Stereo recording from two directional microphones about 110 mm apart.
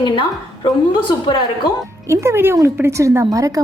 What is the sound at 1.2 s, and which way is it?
Speech, 45° left (ahead or behind).